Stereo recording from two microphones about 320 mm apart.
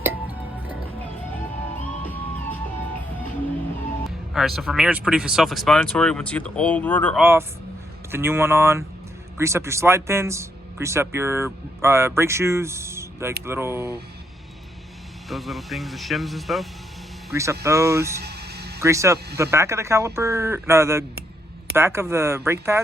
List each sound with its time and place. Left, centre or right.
4.0 s speech: centre
7.2 s speech: centre
15.3 s speech: centre
18.2 s music: right
18.8 s speech: centre